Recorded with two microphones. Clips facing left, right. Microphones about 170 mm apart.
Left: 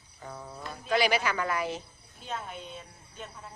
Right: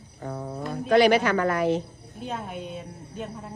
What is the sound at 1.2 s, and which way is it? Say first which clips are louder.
Speech: right 7 dB; 55° right (ahead or behind).